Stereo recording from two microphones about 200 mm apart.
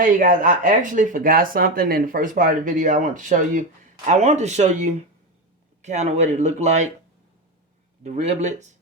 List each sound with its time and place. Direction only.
0.0 s speech: 40° right (ahead or behind)
8.0 s speech: 35° right (ahead or behind)